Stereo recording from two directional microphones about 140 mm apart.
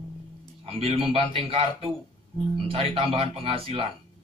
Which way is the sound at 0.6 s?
45° right (ahead or behind).